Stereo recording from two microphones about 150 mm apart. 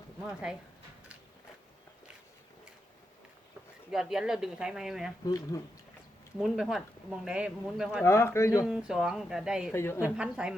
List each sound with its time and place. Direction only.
3.9 s speech: 5° right (ahead or behind)
5.2 s speech: 25° left (ahead or behind)
6.4 s speech: centre (ahead or behind)
8.0 s speech: 15° left (ahead or behind)
8.6 s speech: 5° right (ahead or behind)
9.7 s speech: 15° left (ahead or behind)
10.2 s a woman's voice: 5° right (ahead or behind)